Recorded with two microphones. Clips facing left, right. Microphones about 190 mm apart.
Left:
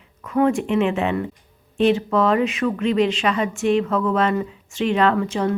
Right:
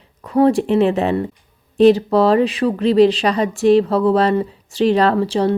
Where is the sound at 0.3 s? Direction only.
35° right (ahead or behind).